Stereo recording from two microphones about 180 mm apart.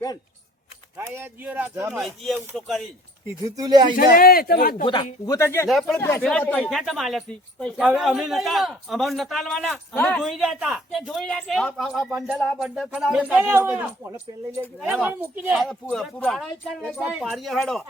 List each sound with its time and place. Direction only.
0.9 s speech: 10° right (ahead or behind)
2.0 s speech: centre (ahead or behind)
3.2 s speech: 20° right (ahead or behind)
3.9 s speech: 55° left (ahead or behind)
5.2 s speech: 15° left (ahead or behind); by 17.8 s centre (ahead or behind)